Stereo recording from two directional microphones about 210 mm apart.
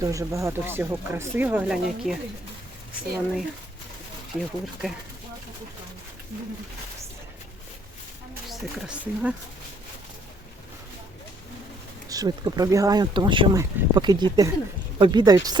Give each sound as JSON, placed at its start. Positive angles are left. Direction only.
{"t": 0.0, "sound": "speech", "side_deg": -15}
{"t": 4.4, "sound": "speech", "side_deg": 0}
{"t": 8.4, "sound": "speech", "side_deg": -5}
{"t": 12.0, "sound": "speech", "side_deg": -15}